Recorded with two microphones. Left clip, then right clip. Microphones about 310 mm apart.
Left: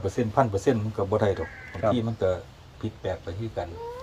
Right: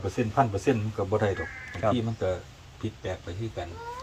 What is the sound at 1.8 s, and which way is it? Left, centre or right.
Speech, right.